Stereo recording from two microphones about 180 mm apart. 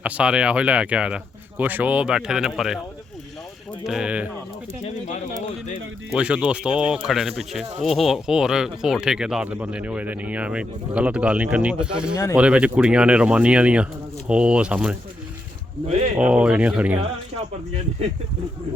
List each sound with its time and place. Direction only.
0.0 s speech: 5° right (ahead or behind)
3.8 s speech: 5° right (ahead or behind)
5.0 s speech: 40° left (ahead or behind)
6.1 s speech: 5° right (ahead or behind)
12.1 s speech: 15° left (ahead or behind)
12.4 s speech: 5° right (ahead or behind)
16.1 s speech: 5° right (ahead or behind)